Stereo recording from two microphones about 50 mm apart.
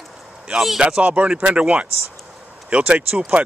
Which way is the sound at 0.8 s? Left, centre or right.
Centre.